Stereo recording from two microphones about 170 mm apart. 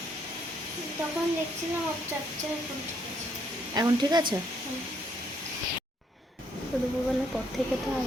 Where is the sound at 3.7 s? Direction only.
25° right (ahead or behind).